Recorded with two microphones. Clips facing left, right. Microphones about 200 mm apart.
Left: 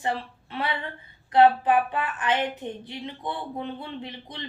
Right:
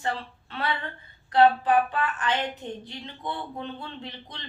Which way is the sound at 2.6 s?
20° left (ahead or behind).